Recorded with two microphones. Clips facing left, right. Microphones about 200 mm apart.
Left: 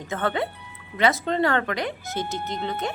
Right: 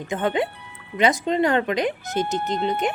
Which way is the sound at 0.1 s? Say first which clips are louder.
Right 3 dB; 15° right (ahead or behind).